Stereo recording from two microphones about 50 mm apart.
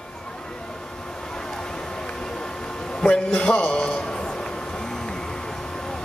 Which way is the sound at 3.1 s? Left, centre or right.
Left.